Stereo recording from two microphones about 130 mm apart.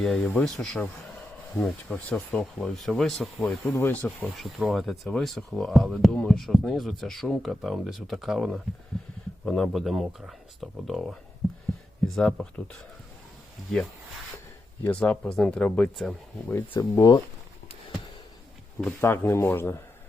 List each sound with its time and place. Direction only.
0.0 s speech: 5° left (ahead or behind)
3.7 s speech: 20° left (ahead or behind)
4.4 s speech: centre (ahead or behind)
14.8 s speech: 10° left (ahead or behind)
16.5 s speech: 15° left (ahead or behind)
18.9 s speech: 20° left (ahead or behind)